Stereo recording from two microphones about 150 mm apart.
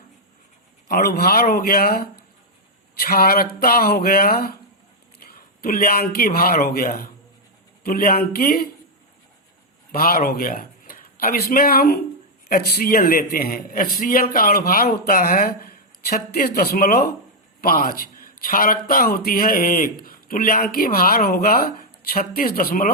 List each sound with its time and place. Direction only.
0.9 s speech: 90° left
5.2 s a woman's voice: 80° left
9.9 s a man's voice: 75° left (ahead or behind); by 17.2 s 90° left
17.6 s a man's voice: 75° left (ahead or behind)